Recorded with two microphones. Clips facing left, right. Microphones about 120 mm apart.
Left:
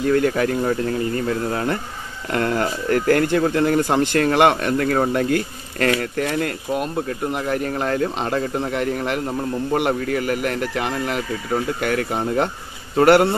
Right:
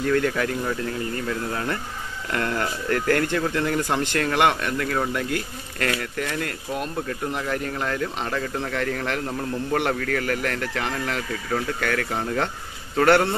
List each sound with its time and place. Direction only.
0.0 s a man's voice: 30° left (ahead or behind)
4.7 s a man's voice: 40° left (ahead or behind); by 13.3 s 20° left (ahead or behind)